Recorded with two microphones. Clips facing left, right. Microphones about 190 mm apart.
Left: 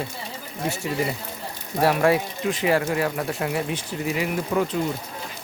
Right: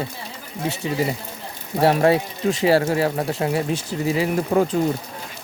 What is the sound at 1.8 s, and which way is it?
Speech, 30° right (ahead or behind).